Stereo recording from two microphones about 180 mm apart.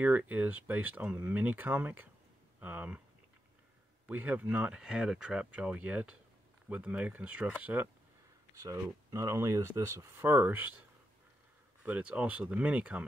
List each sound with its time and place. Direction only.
0.0 s speech: 10° right (ahead or behind)
4.1 s speech: 10° right (ahead or behind)
11.8 s speech: 10° right (ahead or behind)